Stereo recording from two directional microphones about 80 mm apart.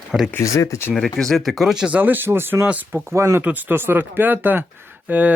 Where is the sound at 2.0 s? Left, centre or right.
Right.